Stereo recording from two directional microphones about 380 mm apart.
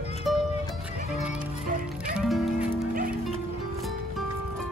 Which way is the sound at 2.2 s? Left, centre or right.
Centre.